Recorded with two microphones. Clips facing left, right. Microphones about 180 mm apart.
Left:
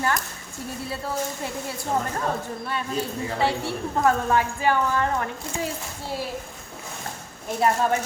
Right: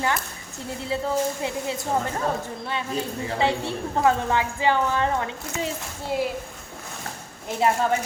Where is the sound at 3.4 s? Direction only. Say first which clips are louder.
Right 1 dB; 20° right (ahead or behind).